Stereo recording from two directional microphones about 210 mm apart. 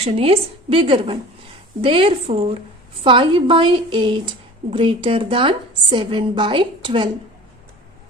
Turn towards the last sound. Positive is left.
turn(degrees=-25)  # may be behind; listen again after turning